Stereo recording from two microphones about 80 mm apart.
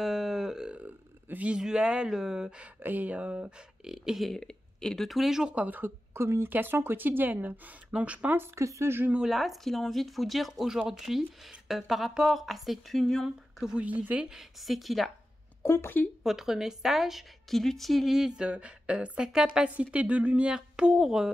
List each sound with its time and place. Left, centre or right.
0.0 s grunt: centre
0.8 s a woman's voice: centre
5.8 s a woman's voice: right
8.5 s speech: right
9.1 s speech: centre
13.7 s speech: centre
14.3 s speech: centre
15.6 s speech: left
16.2 s a woman's voice: centre